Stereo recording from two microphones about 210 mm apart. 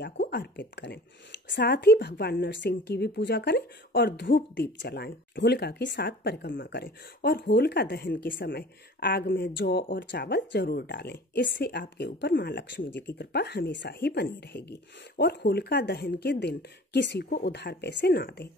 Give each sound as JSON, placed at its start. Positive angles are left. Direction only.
{"t": 0.0, "sound": "a woman's voice", "side_deg": 55}
{"t": 6.6, "sound": "speech", "side_deg": 45}